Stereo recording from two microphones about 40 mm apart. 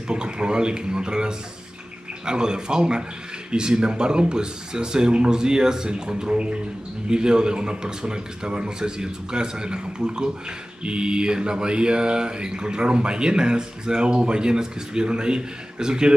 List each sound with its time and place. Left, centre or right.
0.1 s mantra: right